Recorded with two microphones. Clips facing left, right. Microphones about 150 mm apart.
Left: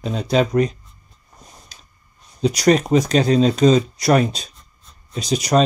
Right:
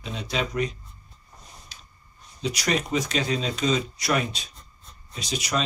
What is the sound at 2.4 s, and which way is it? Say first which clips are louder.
Speech: left 11 dB; 40° left (ahead or behind).